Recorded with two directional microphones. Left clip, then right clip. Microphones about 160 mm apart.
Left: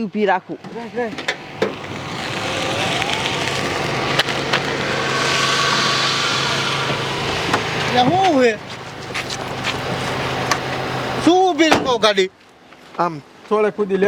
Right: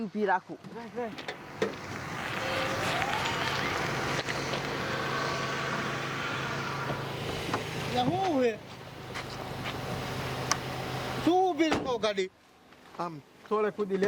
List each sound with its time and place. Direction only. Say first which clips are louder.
0.2 s speech: left 10 dB; 25° left (ahead or behind)
1.1 s vehicle: left 15 dB; 15° left (ahead or behind); by 4.1 s 30° left (ahead or behind)
4.1 s a sound: left 14 dB; 15° left (ahead or behind)
4.7 s vehicle: left 12 dB; 30° left (ahead or behind)
8.2 s speech: left 13 dB; 40° left (ahead or behind)
9.3 s a sound: left 14 dB; 20° left (ahead or behind)
11.3 s speech: left 12 dB; 35° left (ahead or behind)